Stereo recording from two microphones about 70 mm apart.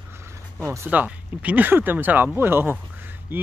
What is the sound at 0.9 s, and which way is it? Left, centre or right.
Speech, right.